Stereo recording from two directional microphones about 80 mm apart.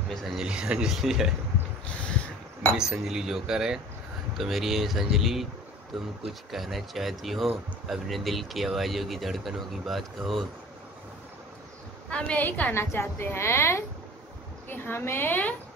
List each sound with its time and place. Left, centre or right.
0.1 s speech: centre
0.5 s speech: centre
2.8 s speech: centre
12.1 s a woman's voice: centre
12.7 s a woman's voice: left